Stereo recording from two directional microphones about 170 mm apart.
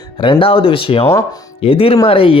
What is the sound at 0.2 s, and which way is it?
Speech, 30° left (ahead or behind).